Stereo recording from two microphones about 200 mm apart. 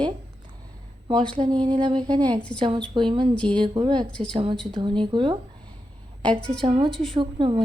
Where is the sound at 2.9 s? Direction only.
25° right (ahead or behind).